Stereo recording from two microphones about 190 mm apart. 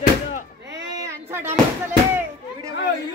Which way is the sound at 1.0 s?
10° right (ahead or behind).